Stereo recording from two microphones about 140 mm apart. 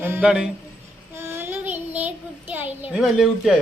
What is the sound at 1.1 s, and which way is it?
Child singing, 15° right (ahead or behind).